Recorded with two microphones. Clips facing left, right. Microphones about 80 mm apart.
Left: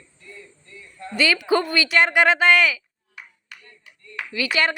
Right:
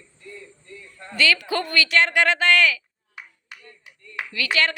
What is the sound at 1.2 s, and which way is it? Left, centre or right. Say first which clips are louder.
Speech: left 3 dB; centre.